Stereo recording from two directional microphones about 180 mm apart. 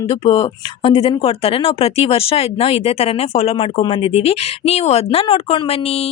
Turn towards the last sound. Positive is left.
turn(degrees=30)  # may be behind; listen again after turning